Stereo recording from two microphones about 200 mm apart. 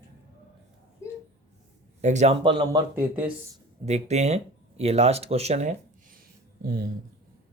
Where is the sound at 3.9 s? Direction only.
35° right (ahead or behind).